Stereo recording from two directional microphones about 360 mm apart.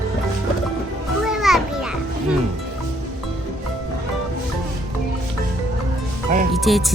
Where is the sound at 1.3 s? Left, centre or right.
Centre.